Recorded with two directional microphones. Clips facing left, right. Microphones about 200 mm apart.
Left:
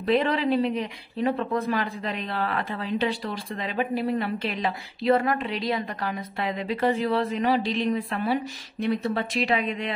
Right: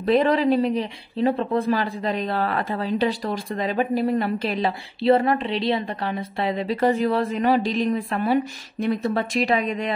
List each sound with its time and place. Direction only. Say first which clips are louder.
0.0 s speech: right 4 dB; 40° right (ahead or behind)